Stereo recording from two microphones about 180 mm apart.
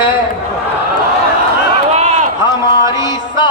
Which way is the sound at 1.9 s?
40° right (ahead or behind).